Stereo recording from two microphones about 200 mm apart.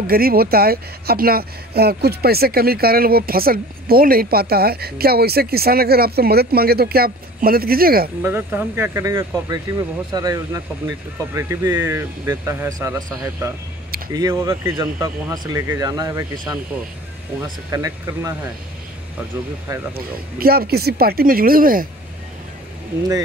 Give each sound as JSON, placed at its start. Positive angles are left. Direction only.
{"t": 0.0, "sound": "speech", "side_deg": -50}
{"t": 8.2, "sound": "speech", "side_deg": -10}
{"t": 17.6, "sound": "speech", "side_deg": -15}
{"t": 20.3, "sound": "speech", "side_deg": -50}